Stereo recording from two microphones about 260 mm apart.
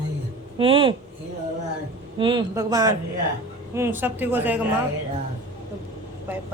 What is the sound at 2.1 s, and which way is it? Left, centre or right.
A woman's voice, centre.